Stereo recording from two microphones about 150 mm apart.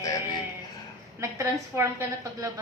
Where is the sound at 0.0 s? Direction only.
20° left (ahead or behind).